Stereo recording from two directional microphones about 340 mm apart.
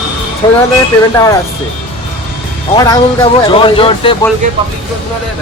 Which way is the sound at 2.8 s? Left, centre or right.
Centre.